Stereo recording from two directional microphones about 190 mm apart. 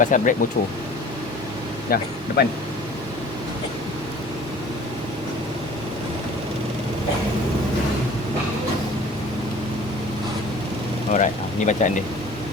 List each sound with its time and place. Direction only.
0.0 s speech: 45° left (ahead or behind)
1.9 s speech: 55° left (ahead or behind)
11.1 s speech: 40° left (ahead or behind)